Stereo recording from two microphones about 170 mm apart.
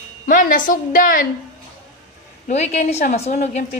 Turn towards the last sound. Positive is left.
turn(degrees=45)  # may be behind; listen again after turning